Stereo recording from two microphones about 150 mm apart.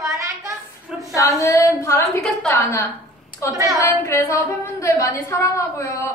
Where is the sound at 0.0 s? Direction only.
20° right (ahead or behind).